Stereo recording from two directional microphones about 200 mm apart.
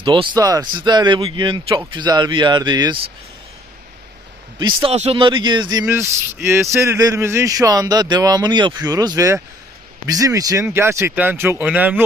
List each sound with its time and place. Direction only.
0.0 s speech: 25° right (ahead or behind)
4.6 s speech: 30° right (ahead or behind); by 12.0 s 10° right (ahead or behind)